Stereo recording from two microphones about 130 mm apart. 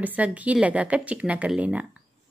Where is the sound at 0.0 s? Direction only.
10° right (ahead or behind).